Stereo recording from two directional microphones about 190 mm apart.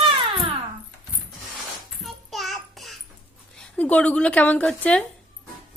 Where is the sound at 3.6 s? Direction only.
5° left (ahead or behind).